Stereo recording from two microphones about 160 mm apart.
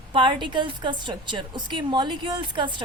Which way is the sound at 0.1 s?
30° right (ahead or behind).